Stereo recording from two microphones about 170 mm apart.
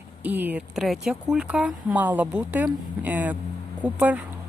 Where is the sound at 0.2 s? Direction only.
10° right (ahead or behind).